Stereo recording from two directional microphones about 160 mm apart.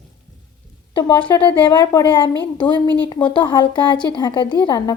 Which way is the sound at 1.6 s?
25° left (ahead or behind).